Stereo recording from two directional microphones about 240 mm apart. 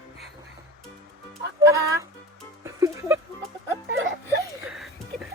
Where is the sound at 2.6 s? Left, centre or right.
Centre.